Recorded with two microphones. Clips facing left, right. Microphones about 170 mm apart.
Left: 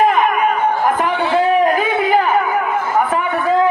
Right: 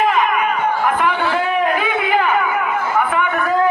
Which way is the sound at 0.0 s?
45° left (ahead or behind).